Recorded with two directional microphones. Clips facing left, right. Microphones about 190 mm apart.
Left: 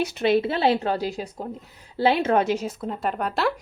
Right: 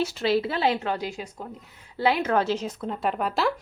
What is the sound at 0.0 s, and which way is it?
A woman's voice, 20° left (ahead or behind).